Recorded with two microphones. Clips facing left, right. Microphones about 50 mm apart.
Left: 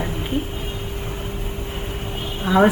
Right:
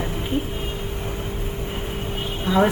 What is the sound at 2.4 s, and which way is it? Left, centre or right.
Speech, centre.